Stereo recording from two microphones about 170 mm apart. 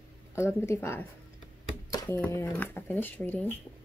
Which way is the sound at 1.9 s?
20° left (ahead or behind).